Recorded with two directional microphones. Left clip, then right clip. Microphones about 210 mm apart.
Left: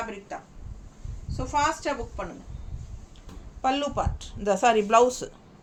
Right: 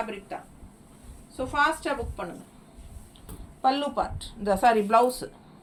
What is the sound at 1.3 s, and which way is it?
Speech, 15° left (ahead or behind).